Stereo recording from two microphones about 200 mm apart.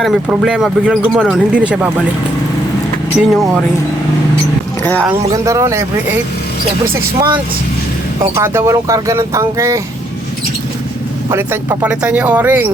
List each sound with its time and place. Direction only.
0.0 s speech: centre (ahead or behind)
3.3 s speech: centre (ahead or behind)
4.8 s speech: 10° left (ahead or behind)
5.3 s speech: 15° right (ahead or behind)
8.4 s speech: 15° right (ahead or behind)
11.3 s speech: 15° right (ahead or behind)